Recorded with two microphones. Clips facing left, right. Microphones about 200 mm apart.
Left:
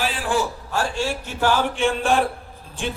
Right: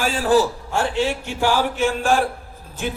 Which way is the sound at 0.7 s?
20° right (ahead or behind).